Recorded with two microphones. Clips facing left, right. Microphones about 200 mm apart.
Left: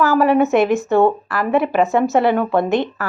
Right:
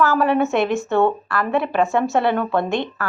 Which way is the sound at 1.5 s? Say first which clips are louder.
Left 4 dB; 5° left (ahead or behind).